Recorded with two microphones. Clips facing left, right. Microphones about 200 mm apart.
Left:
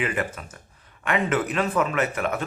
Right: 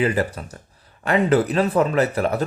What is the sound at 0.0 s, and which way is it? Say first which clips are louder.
Speech: right 6 dB; 35° right (ahead or behind).